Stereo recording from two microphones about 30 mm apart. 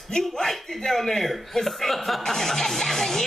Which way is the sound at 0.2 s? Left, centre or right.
Centre.